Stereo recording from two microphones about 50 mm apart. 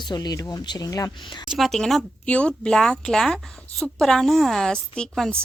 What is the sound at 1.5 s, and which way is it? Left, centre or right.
Speech, centre.